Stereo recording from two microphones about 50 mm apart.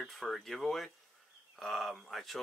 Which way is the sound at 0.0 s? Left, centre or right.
Centre.